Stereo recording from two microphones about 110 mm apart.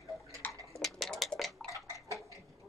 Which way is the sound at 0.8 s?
Centre (ahead or behind).